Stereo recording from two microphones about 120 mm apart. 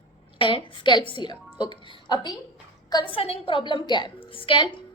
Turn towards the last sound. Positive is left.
turn(degrees=45)  # may be behind; listen again after turning